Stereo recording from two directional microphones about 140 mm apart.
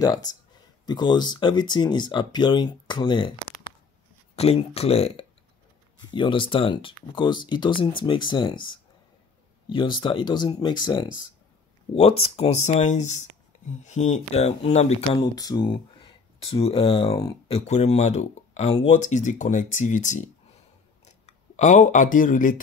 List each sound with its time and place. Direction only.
0.0 s speech: 30° left (ahead or behind)
4.4 s speech: 45° left (ahead or behind)
6.1 s speech: 35° left (ahead or behind)
11.9 s speech: 45° left (ahead or behind)
15.1 s speech: 25° left (ahead or behind)
17.5 s speech: 50° left (ahead or behind); by 22.6 s 70° left (ahead or behind)